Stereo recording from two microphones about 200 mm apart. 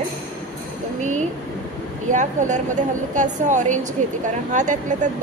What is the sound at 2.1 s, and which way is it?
A woman's voice, 40° right (ahead or behind).